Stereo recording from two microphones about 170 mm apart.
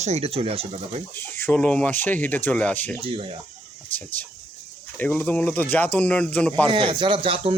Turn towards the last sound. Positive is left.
turn(degrees=-30)  # may be behind; listen again after turning